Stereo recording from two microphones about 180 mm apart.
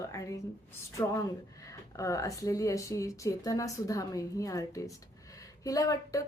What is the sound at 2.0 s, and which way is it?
Speech, 20° left (ahead or behind).